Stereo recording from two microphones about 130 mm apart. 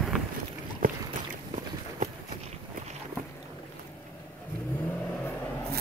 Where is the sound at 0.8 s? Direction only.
90° right.